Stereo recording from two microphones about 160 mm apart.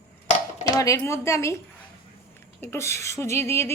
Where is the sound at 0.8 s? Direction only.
20° left (ahead or behind).